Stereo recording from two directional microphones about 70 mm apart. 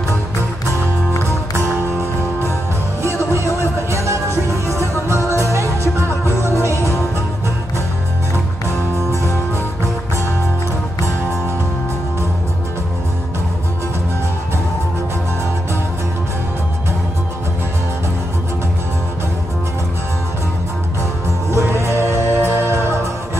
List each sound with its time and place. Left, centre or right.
3.9 s music: right
6.7 s music: left
21.5 s music: right